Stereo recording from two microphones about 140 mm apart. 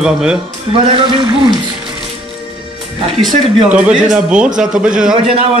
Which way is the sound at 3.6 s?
10° right (ahead or behind).